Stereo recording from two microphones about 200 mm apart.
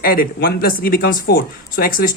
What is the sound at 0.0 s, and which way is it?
Speech, 45° left (ahead or behind).